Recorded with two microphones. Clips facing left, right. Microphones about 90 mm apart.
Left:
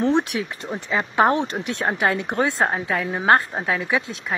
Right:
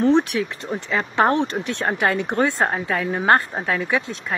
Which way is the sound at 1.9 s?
5° left (ahead or behind).